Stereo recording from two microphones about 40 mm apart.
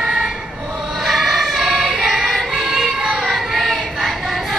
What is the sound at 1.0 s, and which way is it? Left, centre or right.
Choir, centre.